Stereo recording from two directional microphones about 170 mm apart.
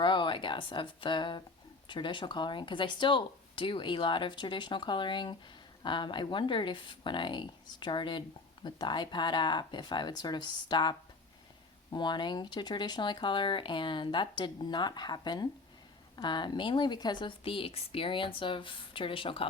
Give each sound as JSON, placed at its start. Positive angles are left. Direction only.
{"t": 0.0, "sound": "speech", "side_deg": 30}